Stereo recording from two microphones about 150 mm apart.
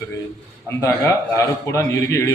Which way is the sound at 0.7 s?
20° left (ahead or behind).